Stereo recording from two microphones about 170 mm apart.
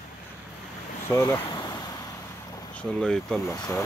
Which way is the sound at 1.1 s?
20° left (ahead or behind).